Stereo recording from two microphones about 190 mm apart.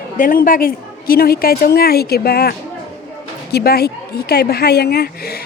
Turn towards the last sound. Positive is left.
turn(degrees=55)  # may be behind; listen again after turning